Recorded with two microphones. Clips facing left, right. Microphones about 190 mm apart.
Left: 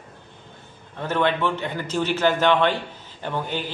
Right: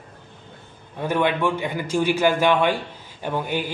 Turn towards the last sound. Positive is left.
turn(degrees=-10)  # may be behind; listen again after turning